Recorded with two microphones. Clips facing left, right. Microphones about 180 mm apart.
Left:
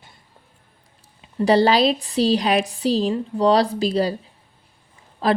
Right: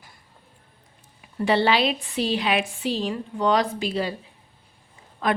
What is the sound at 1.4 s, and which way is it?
A woman's voice, 40° left (ahead or behind).